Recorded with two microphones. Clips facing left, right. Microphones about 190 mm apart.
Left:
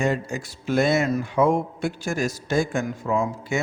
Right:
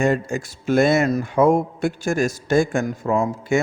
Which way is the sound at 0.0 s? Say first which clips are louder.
Right 4 dB; 50° right (ahead or behind).